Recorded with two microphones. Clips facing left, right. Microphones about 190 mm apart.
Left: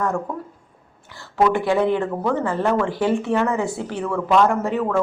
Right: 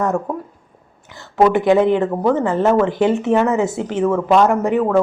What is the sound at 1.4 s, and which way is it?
Speech, 20° right (ahead or behind).